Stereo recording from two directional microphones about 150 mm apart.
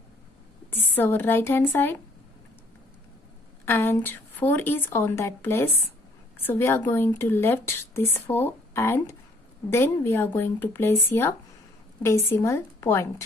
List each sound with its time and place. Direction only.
0.7 s speech: 15° left (ahead or behind)
3.6 s speech: 15° left (ahead or behind)